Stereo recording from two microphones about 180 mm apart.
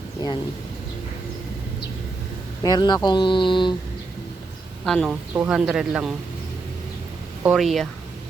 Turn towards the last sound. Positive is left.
turn(degrees=0)  # may be behind; listen again after turning